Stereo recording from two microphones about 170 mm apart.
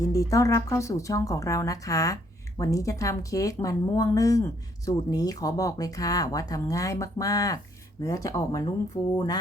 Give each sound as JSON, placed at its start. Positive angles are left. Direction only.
{"t": 0.0, "sound": "speech", "side_deg": 20}